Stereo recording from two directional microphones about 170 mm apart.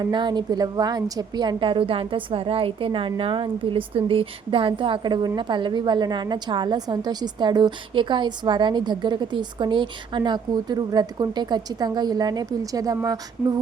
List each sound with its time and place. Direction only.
0.0 s a woman's voice: 25° right (ahead or behind)